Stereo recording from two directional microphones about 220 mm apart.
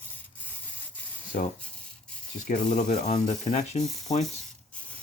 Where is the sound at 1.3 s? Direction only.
40° left (ahead or behind).